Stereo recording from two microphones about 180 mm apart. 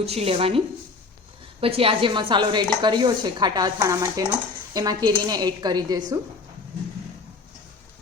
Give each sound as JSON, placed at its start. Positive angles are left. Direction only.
{"t": 0.0, "sound": "a woman's voice", "side_deg": -35}
{"t": 1.6, "sound": "speech", "side_deg": -30}